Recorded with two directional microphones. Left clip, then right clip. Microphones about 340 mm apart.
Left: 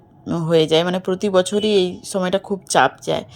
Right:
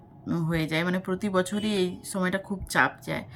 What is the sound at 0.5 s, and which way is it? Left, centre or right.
A woman's voice, centre.